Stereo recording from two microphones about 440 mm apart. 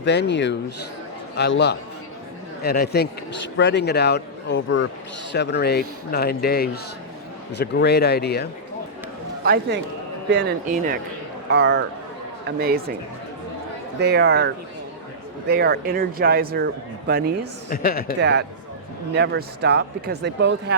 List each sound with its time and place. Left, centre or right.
0.0 s speech: left
9.4 s speech: right
14.0 s speech: right
17.7 s speech: centre
18.2 s speech: right